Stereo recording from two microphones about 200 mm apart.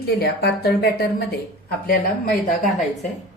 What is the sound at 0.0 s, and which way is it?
A woman's voice, 55° left (ahead or behind).